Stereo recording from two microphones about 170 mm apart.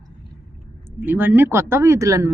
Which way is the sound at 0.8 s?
10° right (ahead or behind).